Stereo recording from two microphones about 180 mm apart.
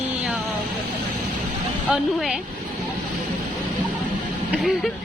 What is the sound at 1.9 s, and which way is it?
Speech, 5° right (ahead or behind).